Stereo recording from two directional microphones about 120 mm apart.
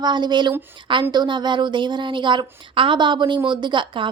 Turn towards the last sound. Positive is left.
turn(degrees=-40)  # may be behind; listen again after turning